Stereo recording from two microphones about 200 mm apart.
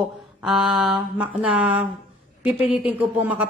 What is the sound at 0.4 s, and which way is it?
A woman's voice, centre (ahead or behind).